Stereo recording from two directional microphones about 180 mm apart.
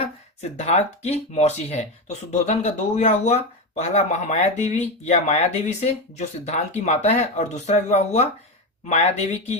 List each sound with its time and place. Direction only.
0.5 s speech: 35° left (ahead or behind)